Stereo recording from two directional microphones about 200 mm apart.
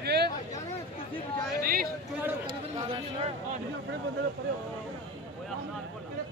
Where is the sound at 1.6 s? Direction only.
45° right (ahead or behind).